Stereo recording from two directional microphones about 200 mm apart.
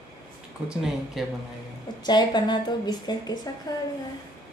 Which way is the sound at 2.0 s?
20° left (ahead or behind).